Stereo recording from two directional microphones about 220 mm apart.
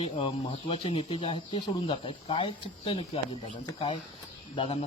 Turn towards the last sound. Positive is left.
turn(degrees=25)  # may be behind; listen again after turning